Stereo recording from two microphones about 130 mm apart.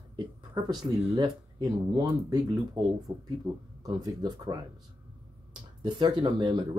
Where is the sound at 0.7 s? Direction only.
30° right (ahead or behind).